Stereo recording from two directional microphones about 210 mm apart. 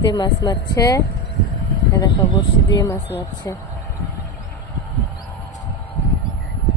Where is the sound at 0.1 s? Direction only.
20° left (ahead or behind).